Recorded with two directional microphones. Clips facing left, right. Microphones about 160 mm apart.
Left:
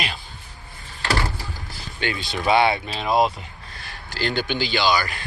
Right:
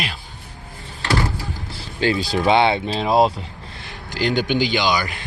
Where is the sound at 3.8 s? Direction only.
20° right (ahead or behind).